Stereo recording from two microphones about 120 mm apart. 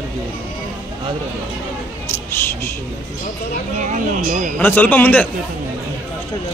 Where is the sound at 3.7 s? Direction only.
90° right.